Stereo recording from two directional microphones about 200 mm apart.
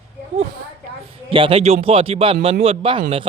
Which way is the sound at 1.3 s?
25° right (ahead or behind).